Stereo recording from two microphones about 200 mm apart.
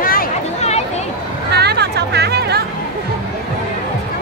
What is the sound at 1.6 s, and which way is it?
Music, 55° right (ahead or behind).